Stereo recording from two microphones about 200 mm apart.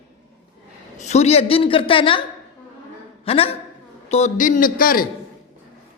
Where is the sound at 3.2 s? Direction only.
30° left (ahead or behind).